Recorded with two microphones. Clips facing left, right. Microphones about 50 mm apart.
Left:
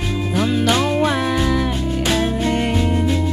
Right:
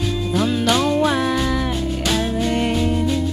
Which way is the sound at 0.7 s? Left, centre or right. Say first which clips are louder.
Right 2 dB; left.